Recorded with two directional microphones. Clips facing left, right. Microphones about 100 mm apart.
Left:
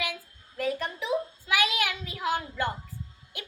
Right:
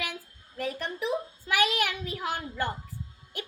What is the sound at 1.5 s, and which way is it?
Speech, 45° right (ahead or behind).